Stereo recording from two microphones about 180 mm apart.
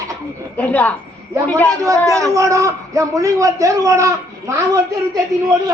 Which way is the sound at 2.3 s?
15° right (ahead or behind).